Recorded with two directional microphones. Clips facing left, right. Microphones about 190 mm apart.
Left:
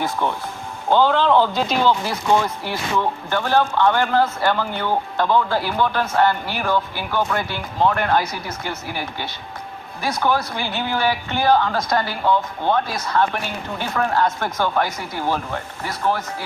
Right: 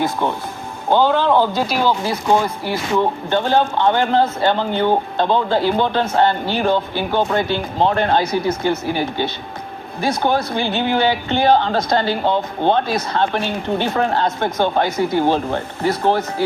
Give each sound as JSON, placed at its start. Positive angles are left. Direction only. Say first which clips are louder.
{"t": 0.0, "sound": "a man's voice", "louder": "right 3 dB", "side_deg": -15}